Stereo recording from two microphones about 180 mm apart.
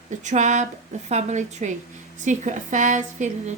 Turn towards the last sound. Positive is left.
turn(degrees=-40)  # may be behind; listen again after turning